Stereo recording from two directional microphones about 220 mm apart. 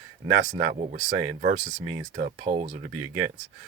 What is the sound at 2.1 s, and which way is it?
Speech, 35° right (ahead or behind).